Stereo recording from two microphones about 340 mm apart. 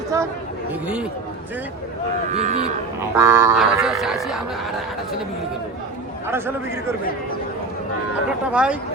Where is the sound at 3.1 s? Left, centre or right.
Centre.